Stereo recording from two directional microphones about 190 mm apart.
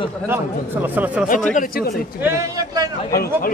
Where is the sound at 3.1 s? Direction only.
55° left (ahead or behind).